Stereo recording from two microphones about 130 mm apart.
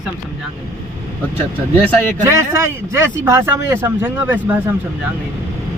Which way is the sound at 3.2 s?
20° right (ahead or behind).